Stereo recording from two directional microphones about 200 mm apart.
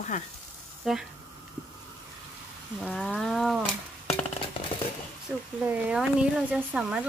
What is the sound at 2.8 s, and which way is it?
Speech, centre (ahead or behind).